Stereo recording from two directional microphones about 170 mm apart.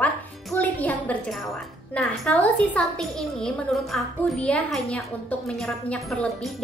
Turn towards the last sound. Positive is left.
turn(degrees=5)  # may be behind; listen again after turning